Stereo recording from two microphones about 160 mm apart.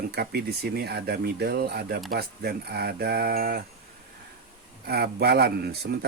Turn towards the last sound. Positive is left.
turn(degrees=-85)